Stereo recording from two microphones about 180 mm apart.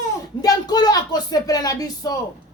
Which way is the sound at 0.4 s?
20° left (ahead or behind).